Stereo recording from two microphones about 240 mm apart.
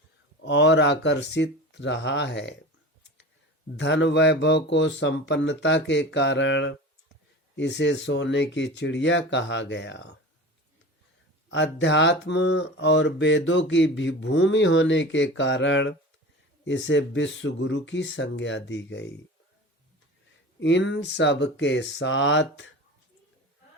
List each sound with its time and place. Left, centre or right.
0.4 s speech: left
3.8 s speech: left
11.5 s speech: left
20.6 s speech: left